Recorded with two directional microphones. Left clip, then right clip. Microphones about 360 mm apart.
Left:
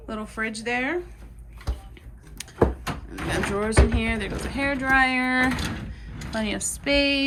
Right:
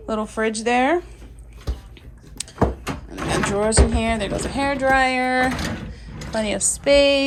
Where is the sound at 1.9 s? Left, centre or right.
Centre.